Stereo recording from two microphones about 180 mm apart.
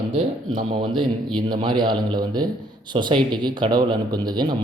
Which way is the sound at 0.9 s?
5° left (ahead or behind).